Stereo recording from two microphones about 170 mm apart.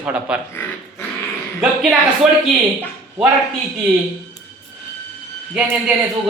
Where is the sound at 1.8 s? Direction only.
Centre (ahead or behind).